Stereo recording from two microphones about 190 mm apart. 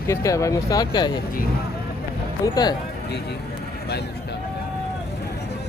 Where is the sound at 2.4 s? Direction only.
20° left (ahead or behind).